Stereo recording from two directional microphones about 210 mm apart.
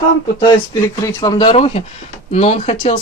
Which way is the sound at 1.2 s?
20° left (ahead or behind).